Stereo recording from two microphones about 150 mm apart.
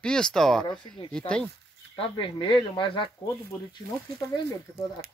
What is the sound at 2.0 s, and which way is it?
Speech, 35° left (ahead or behind).